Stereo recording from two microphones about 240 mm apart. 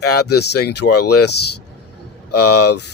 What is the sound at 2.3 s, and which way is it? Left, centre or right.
Speech, left.